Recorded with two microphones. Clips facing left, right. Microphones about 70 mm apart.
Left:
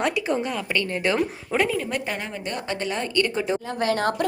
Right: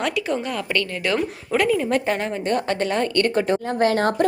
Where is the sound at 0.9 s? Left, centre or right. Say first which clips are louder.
Left 1 dB; left.